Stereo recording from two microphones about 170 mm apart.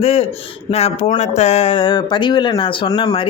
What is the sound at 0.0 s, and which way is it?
Speech, 35° left (ahead or behind).